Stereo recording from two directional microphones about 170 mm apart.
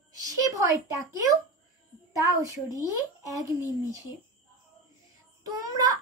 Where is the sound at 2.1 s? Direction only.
20° right (ahead or behind).